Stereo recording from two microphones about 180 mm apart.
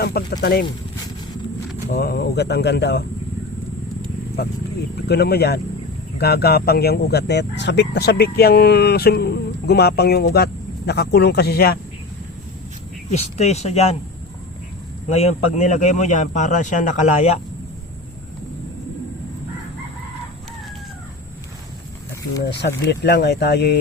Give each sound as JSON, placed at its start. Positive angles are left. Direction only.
{"t": 0.0, "sound": "speech", "side_deg": 60}
{"t": 1.9, "sound": "speech", "side_deg": 60}
{"t": 4.9, "sound": "speech", "side_deg": 65}
{"t": 13.1, "sound": "speech", "side_deg": 40}
{"t": 15.1, "sound": "speech", "side_deg": 35}
{"t": 22.4, "sound": "speech", "side_deg": 70}